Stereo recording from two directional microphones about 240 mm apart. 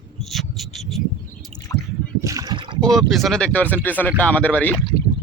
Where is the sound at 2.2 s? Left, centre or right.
Centre.